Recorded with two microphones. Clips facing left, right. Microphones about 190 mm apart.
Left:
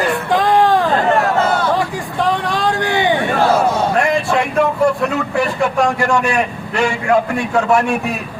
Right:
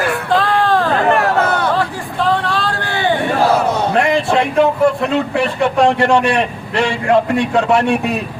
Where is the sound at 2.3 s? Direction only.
15° left (ahead or behind).